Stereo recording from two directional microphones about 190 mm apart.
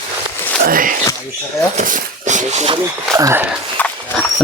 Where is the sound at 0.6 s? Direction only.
45° right (ahead or behind).